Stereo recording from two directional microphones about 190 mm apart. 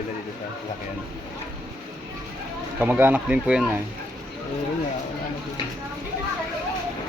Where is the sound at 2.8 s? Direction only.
10° right (ahead or behind).